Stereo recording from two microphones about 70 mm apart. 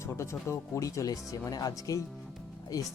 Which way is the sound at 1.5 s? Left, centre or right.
Left.